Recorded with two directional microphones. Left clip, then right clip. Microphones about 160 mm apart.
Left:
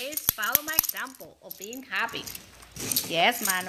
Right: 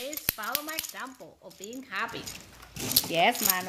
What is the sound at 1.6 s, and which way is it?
Speech, centre (ahead or behind).